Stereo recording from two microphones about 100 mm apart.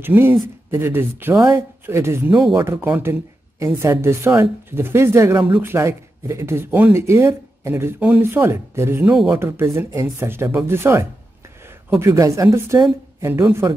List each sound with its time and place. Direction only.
0.0 s a woman's voice: 20° right (ahead or behind)